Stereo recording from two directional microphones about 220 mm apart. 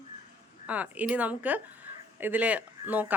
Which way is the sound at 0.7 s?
5° right (ahead or behind).